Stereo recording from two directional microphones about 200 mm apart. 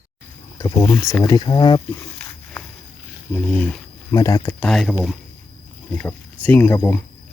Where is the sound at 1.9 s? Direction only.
10° left (ahead or behind).